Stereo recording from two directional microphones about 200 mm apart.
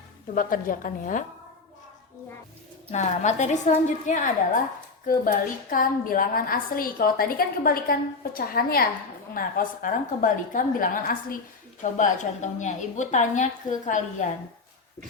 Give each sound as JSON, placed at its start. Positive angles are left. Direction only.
{"t": 0.3, "sound": "a woman's voice", "side_deg": 45}
{"t": 2.9, "sound": "a woman's voice", "side_deg": 35}
{"t": 5.7, "sound": "a woman's voice", "side_deg": 45}